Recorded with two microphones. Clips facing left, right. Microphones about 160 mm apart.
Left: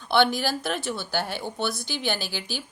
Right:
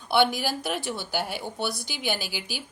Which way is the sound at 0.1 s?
10° right (ahead or behind).